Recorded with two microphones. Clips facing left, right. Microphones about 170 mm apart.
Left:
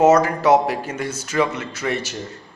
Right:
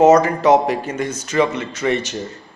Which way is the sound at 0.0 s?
10° left (ahead or behind).